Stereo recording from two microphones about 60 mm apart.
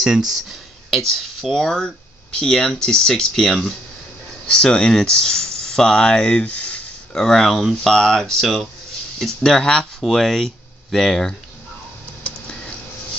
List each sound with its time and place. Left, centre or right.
0.3 s speech: centre; by 6.8 s left
7.2 s speech: centre